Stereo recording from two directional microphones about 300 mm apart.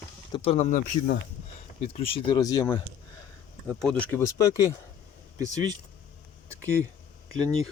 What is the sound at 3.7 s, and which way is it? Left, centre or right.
Speech, centre.